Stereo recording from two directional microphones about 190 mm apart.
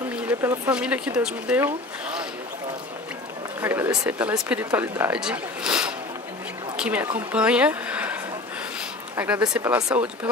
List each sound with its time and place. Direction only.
0.1 s speech: 10° right (ahead or behind)
3.6 s speech: 10° right (ahead or behind)